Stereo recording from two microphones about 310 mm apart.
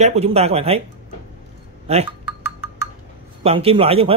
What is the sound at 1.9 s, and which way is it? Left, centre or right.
Speech, centre.